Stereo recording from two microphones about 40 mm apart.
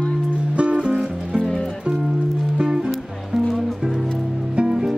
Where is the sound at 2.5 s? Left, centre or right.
Centre.